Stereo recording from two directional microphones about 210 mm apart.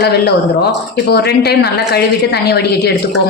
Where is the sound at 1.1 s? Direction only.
50° left (ahead or behind).